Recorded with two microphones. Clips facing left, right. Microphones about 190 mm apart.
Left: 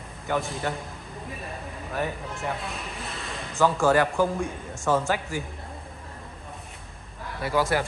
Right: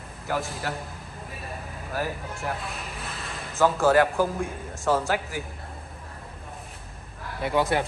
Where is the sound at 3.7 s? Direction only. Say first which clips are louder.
Right 3 dB; centre (ahead or behind).